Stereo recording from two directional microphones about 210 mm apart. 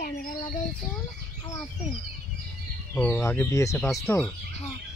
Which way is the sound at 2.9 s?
10° left (ahead or behind).